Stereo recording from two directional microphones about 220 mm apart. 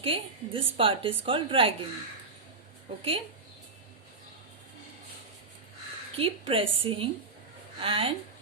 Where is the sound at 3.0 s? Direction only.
25° right (ahead or behind).